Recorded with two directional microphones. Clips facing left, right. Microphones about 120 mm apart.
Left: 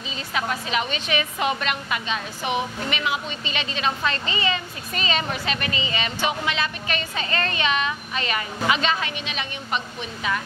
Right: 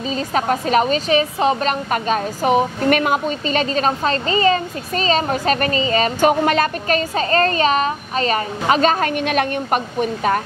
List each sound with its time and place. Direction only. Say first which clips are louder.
0.1 s a woman's voice: right 8 dB; 40° right (ahead or behind)